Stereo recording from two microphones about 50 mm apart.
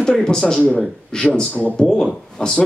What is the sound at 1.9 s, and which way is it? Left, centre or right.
Speech, centre.